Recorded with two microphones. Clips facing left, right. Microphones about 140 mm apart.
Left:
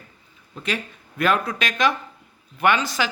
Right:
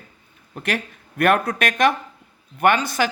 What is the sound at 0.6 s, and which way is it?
Speech, 65° right (ahead or behind).